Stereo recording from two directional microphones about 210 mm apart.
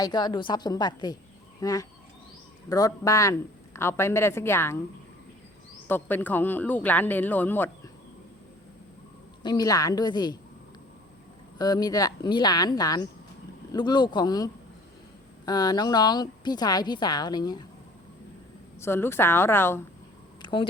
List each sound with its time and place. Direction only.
0.0 s a woman's voice: 20° left (ahead or behind)
5.9 s speech: 10° left (ahead or behind)
9.4 s a woman's voice: 20° left (ahead or behind)
11.5 s a woman's voice: 20° left (ahead or behind)
18.8 s speech: 10° left (ahead or behind)
20.4 s a sound: 25° left (ahead or behind)